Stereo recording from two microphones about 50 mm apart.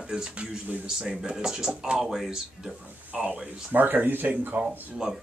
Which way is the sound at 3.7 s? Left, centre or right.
Right.